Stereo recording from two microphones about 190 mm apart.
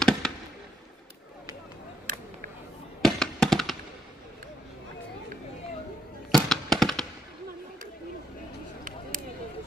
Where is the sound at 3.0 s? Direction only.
Centre (ahead or behind).